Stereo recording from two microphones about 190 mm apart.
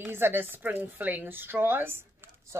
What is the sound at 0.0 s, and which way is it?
Speech, 10° right (ahead or behind).